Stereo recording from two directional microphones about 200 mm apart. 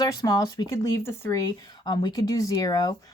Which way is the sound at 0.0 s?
15° left (ahead or behind).